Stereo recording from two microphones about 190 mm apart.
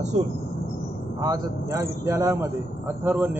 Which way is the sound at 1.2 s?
20° right (ahead or behind).